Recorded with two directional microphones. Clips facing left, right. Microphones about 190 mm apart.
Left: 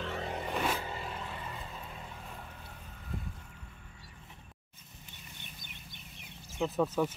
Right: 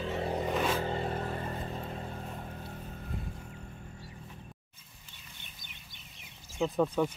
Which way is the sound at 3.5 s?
40° right (ahead or behind).